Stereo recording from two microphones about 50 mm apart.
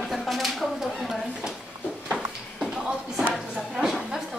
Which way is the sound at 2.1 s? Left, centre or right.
Right.